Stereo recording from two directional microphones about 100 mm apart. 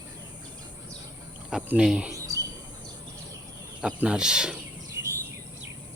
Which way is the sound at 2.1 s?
35° right (ahead or behind).